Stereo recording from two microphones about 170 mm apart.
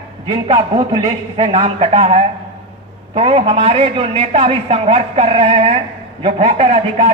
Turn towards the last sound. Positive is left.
turn(degrees=-35)  # may be behind; listen again after turning